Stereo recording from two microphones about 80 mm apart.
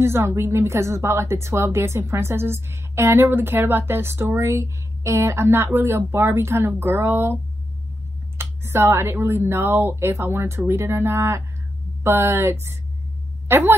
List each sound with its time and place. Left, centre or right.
0.0 s speech: right
8.4 s a woman's voice: right